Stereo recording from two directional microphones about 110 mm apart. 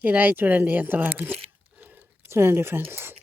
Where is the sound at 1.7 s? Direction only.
15° right (ahead or behind).